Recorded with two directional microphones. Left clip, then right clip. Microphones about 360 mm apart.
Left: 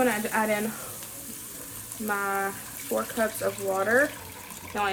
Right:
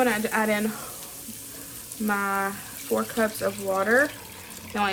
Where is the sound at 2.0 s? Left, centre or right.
Centre.